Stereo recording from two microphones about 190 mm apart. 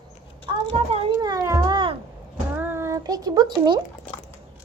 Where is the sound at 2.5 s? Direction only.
10° right (ahead or behind).